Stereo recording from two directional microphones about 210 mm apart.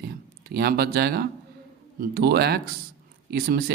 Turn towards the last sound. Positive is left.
turn(degrees=-45)  # may be behind; listen again after turning